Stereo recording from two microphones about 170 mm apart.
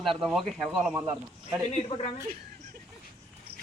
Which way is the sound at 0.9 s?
20° right (ahead or behind).